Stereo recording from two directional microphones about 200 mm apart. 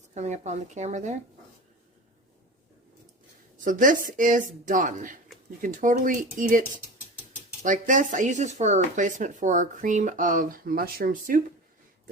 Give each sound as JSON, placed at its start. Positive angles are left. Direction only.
{"t": 0.1, "sound": "speech", "side_deg": -35}
{"t": 3.6, "sound": "speech", "side_deg": -40}